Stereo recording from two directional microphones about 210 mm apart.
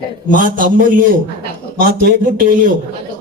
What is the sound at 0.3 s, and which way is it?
Speech, 40° right (ahead or behind).